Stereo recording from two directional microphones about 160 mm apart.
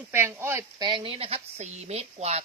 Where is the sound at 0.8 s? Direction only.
30° right (ahead or behind).